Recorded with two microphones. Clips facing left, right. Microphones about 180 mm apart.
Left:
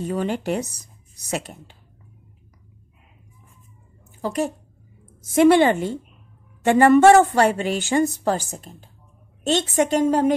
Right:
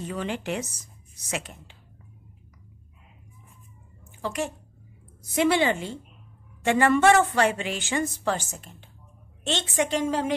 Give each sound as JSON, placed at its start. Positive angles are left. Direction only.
{"t": 0.0, "sound": "a woman's voice", "side_deg": 45}
{"t": 4.2, "sound": "a woman's voice", "side_deg": 35}
{"t": 5.3, "sound": "a woman's voice", "side_deg": 50}